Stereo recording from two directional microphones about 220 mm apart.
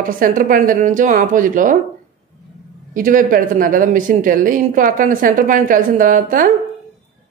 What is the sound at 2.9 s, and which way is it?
Speech, 40° right (ahead or behind).